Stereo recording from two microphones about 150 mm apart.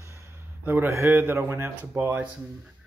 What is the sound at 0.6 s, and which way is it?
Speech, 15° right (ahead or behind).